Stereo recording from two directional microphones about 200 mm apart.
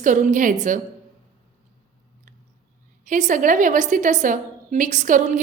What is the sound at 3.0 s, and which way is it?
A woman's voice, 40° right (ahead or behind).